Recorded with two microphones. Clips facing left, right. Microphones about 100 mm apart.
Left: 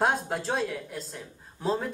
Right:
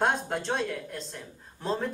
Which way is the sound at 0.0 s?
5° left (ahead or behind).